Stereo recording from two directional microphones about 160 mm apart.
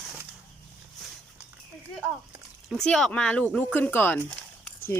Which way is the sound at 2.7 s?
5° left (ahead or behind).